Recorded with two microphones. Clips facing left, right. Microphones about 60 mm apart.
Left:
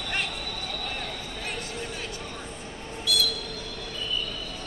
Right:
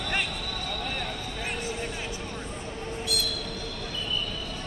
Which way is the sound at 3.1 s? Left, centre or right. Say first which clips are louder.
Left 5 dB; right.